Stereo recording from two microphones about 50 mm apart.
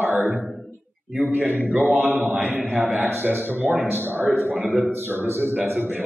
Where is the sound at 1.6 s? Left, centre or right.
Right.